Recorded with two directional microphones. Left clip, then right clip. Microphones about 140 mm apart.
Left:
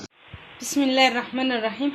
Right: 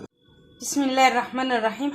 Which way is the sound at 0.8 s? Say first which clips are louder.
Even; 15° left (ahead or behind).